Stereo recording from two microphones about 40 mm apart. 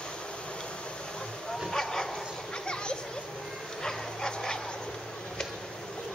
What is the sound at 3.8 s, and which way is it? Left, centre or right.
Dog, centre.